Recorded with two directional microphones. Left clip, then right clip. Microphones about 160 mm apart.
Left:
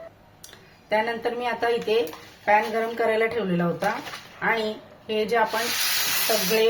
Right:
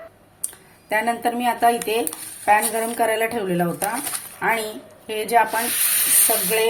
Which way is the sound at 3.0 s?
25° right (ahead or behind).